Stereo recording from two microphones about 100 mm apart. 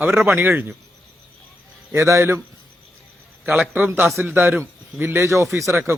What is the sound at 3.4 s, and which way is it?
A man's voice, 10° right (ahead or behind).